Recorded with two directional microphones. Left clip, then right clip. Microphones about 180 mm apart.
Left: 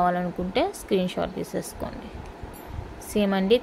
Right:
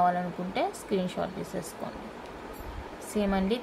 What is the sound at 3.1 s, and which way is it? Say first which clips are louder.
Speech: left 7 dB; 50° left (ahead or behind).